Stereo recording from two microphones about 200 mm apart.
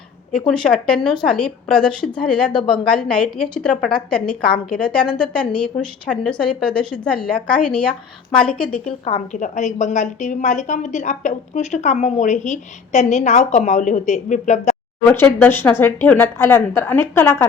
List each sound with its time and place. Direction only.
0.3 s a woman's voice: 5° left (ahead or behind)
8.8 s a woman's voice: 30° left (ahead or behind)
15.0 s speech: 10° left (ahead or behind)